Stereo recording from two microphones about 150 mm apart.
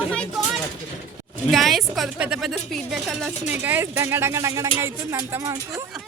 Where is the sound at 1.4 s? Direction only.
Centre (ahead or behind).